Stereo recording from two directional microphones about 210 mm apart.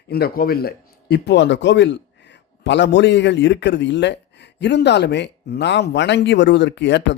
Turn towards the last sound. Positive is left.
turn(degrees=55)  # may be behind; listen again after turning